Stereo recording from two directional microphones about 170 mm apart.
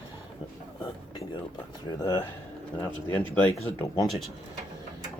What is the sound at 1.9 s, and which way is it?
Speech, 25° left (ahead or behind).